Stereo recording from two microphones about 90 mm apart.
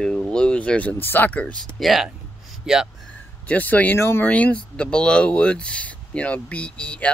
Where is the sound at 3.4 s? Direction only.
15° left (ahead or behind).